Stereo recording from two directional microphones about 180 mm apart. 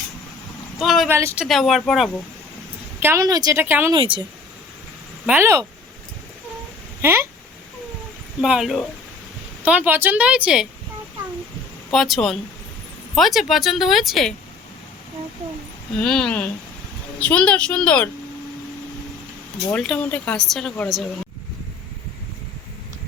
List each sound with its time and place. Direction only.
0.8 s vehicle: centre (ahead or behind)
1.0 s a woman's voice: 15° right (ahead or behind)
1.5 s speech: centre (ahead or behind)
3.0 s a woman's voice: 15° right (ahead or behind)
3.9 s speech: 30° right (ahead or behind)
5.2 s a woman's voice: 10° right (ahead or behind)
7.0 s a woman's voice: 15° right (ahead or behind)
8.4 s a woman's voice: 5° right (ahead or behind)
11.9 s speech: centre (ahead or behind)
16.0 s a woman's voice: 5° left (ahead or behind)
19.7 s speech: 5° left (ahead or behind)